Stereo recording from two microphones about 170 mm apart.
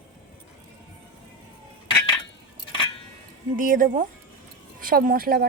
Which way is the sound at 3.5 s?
55° right (ahead or behind).